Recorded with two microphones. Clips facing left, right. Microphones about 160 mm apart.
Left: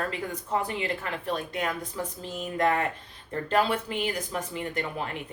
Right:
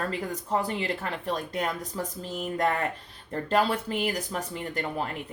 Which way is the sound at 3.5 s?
40° right (ahead or behind).